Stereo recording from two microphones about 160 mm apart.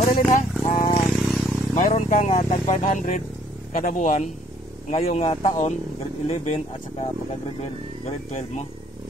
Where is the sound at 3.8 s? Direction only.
50° left (ahead or behind).